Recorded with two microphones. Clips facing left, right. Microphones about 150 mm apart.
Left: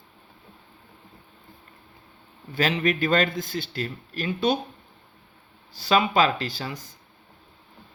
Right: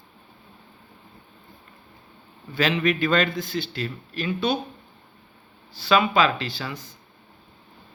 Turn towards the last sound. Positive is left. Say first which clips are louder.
# even
turn(degrees=45)  # may be behind; listen again after turning